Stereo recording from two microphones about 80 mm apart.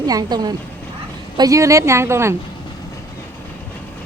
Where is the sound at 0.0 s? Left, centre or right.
Right.